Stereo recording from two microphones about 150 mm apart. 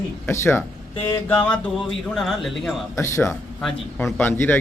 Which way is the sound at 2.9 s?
20° left (ahead or behind).